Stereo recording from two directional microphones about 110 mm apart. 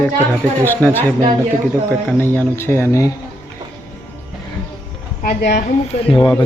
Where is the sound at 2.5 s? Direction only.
25° left (ahead or behind).